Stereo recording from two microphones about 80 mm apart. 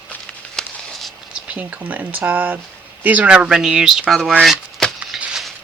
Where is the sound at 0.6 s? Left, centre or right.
Centre.